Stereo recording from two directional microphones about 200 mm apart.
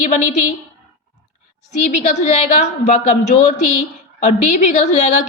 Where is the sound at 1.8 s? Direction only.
35° left (ahead or behind).